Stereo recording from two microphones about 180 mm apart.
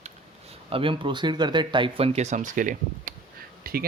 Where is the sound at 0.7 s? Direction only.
30° right (ahead or behind).